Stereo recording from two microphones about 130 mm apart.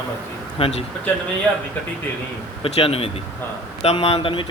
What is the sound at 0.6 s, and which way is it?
Speech, 50° left (ahead or behind).